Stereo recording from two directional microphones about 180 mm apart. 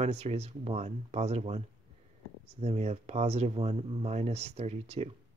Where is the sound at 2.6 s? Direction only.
35° right (ahead or behind).